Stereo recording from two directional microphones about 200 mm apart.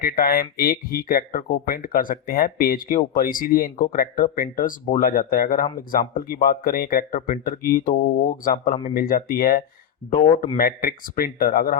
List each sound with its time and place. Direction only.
0.0 s speech: 50° left (ahead or behind)